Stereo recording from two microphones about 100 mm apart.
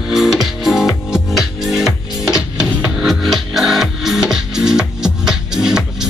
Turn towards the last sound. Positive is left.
turn(degrees=-5)  # may be behind; listen again after turning